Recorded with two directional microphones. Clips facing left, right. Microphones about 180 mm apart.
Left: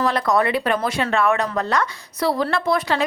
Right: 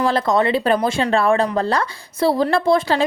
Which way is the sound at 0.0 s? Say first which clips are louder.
Right 2 dB; 30° right (ahead or behind).